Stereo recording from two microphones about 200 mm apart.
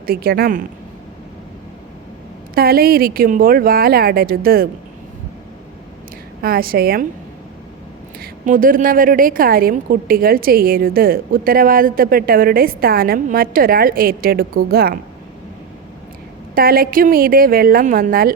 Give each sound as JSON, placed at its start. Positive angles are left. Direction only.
{"t": 0.1, "sound": "a woman's voice", "side_deg": -50}
{"t": 2.6, "sound": "a woman's voice", "side_deg": -50}
{"t": 6.4, "sound": "a woman's voice", "side_deg": -50}
{"t": 8.2, "sound": "a woman's voice", "side_deg": -45}
{"t": 16.6, "sound": "a woman's voice", "side_deg": -45}